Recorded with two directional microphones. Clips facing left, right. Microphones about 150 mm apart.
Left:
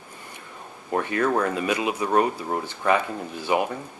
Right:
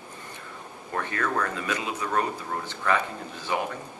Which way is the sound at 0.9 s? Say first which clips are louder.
Left 6 dB; 20° left (ahead or behind).